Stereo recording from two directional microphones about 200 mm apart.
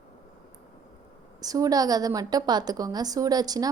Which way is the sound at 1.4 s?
20° right (ahead or behind).